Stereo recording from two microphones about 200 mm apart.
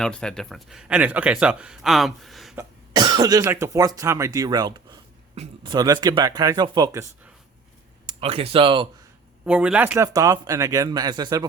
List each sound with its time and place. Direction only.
0.0 s a man's voice: 5° left (ahead or behind)
2.6 s speech: 20° right (ahead or behind)
8.0 s speech: 30° right (ahead or behind)
9.4 s speech: 5° right (ahead or behind)